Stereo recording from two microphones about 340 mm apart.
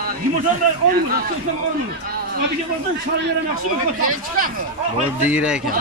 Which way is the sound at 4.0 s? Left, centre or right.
Right.